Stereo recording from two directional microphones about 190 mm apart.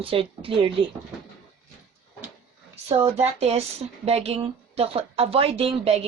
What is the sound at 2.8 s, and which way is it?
Speech, 35° right (ahead or behind).